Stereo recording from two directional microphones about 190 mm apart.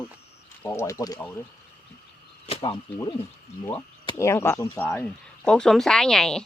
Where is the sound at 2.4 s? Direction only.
25° left (ahead or behind).